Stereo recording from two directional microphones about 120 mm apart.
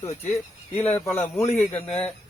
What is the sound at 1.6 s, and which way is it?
Speech, 10° left (ahead or behind).